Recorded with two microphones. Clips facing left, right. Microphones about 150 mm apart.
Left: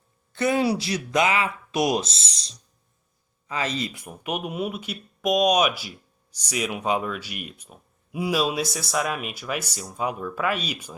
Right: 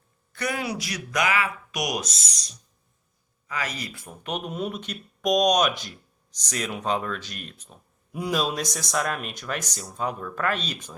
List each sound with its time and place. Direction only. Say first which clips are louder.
0.3 s speech: left 7 dB; 25° left (ahead or behind); by 10.9 s 10° left (ahead or behind)